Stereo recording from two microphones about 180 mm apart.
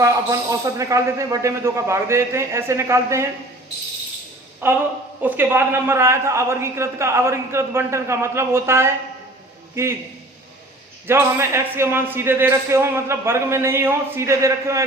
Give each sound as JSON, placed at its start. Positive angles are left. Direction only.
{"t": 0.0, "sound": "a man's voice", "side_deg": -20}
{"t": 4.6, "sound": "a man's voice", "side_deg": -10}
{"t": 11.0, "sound": "a man's voice", "side_deg": -15}